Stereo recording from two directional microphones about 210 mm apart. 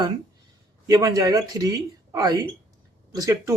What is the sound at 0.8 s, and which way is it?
Speech, 15° right (ahead or behind).